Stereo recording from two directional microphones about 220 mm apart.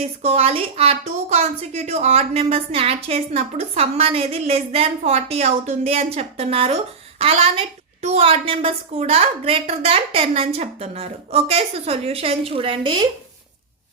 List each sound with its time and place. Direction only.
0.2 s a woman's voice: 30° right (ahead or behind)